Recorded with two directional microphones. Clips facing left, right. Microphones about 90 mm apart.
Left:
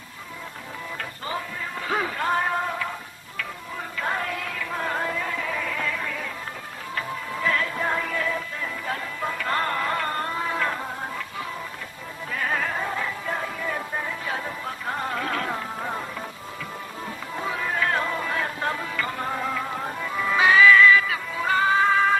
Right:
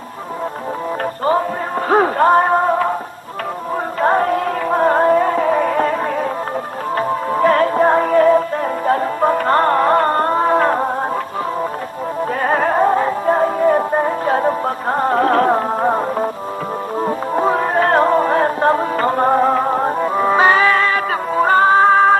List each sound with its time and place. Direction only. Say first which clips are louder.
1.9 s music: right 13 dB; 45° right (ahead or behind)
4.0 s music: right 13 dB; 45° right (ahead or behind)
7.0 s music: right 13 dB; 45° right (ahead or behind)
12.4 s music: right 11 dB; 45° right (ahead or behind)